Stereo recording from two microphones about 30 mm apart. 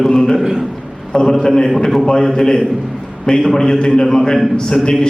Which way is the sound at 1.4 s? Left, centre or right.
Left.